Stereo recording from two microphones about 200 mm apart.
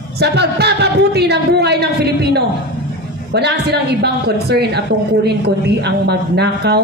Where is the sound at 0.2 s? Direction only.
55° right (ahead or behind).